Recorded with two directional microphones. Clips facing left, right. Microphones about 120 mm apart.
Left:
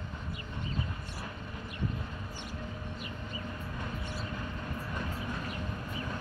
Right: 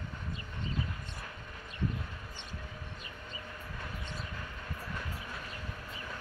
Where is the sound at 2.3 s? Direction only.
10° left (ahead or behind).